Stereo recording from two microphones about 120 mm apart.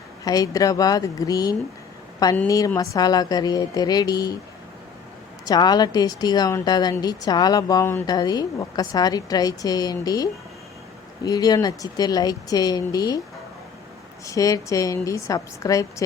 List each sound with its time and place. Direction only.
0.3 s a woman's voice: 30° left (ahead or behind)
5.5 s a woman's voice: 35° left (ahead or behind)
14.3 s a woman's voice: 30° left (ahead or behind)